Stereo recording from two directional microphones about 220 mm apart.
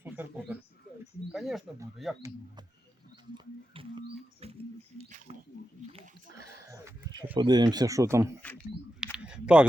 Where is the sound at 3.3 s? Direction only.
20° right (ahead or behind).